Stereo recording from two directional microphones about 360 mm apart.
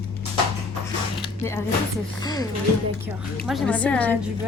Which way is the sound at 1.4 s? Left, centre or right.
Centre.